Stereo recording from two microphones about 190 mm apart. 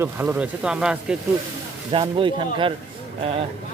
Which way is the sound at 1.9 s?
25° right (ahead or behind).